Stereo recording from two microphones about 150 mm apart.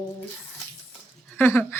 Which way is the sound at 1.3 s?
15° left (ahead or behind).